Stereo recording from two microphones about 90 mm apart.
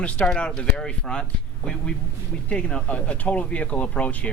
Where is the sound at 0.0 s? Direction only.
10° left (ahead or behind).